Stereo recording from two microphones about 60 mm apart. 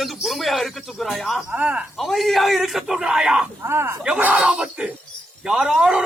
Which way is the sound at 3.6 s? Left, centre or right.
Right.